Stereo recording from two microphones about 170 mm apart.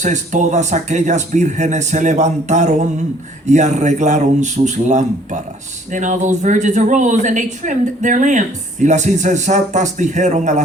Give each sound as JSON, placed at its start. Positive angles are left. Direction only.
{"t": 0.0, "sound": "a woman's voice", "side_deg": -45}